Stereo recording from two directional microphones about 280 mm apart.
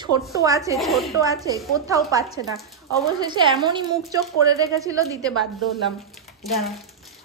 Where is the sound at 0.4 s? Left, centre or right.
Centre.